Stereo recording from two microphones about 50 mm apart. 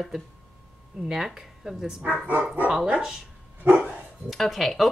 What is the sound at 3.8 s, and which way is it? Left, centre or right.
Speech, centre.